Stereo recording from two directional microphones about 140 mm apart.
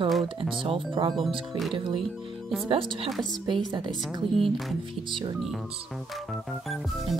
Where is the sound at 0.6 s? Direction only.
35° right (ahead or behind).